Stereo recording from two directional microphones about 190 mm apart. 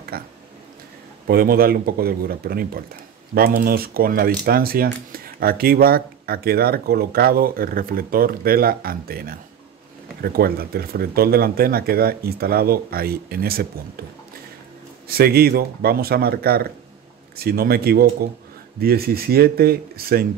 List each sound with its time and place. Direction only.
0.1 s speech: 55° right (ahead or behind)
15.0 s speech: 55° right (ahead or behind)